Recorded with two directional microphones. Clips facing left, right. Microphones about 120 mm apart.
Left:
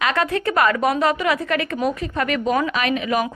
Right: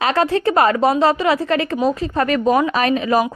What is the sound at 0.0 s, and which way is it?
A woman's voice, 30° right (ahead or behind).